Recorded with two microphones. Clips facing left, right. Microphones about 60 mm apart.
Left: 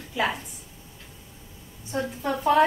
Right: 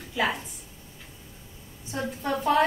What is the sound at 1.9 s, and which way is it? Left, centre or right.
Speech, centre.